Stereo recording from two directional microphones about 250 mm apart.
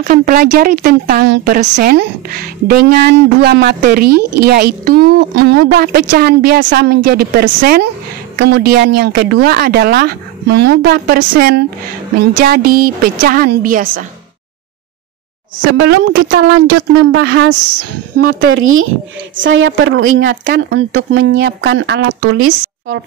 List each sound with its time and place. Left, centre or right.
0.0 s speech: right
4.1 s speech: right
4.8 s speech: right
15.9 s speech: right
17.7 s speech: right
22.2 s speech: right